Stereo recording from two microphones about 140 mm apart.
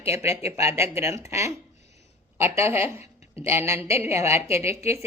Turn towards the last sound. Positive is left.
turn(degrees=-20)  # may be behind; listen again after turning